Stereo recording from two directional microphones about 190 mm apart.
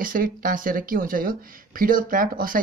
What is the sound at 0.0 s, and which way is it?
Speech, 45° right (ahead or behind).